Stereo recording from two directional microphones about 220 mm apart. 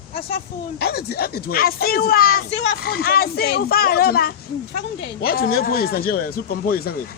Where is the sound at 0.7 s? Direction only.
45° left (ahead or behind).